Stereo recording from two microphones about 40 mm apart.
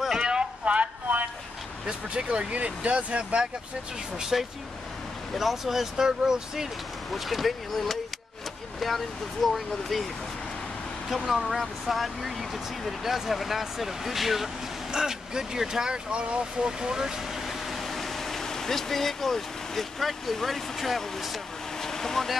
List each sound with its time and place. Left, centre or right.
0.2 s a sound: right
1.0 s a sound: right
1.9 s speech: right
4.3 s speech: centre
7.1 s speech: centre
11.4 s speech: centre
14.9 s speech: centre
16.1 s speech: right
17.5 s speech: centre
21.8 s vehicle: centre